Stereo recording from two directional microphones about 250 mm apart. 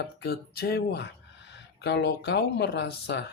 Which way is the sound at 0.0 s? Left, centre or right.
Left.